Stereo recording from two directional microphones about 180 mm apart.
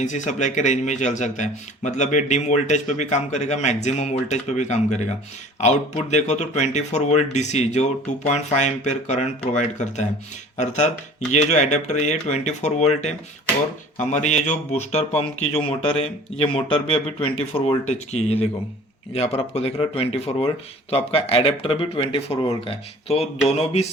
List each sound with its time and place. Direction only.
0.0 s a man's voice: 40° left (ahead or behind)